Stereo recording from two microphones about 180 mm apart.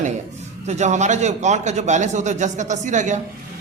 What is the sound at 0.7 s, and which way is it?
A man's voice, 40° right (ahead or behind).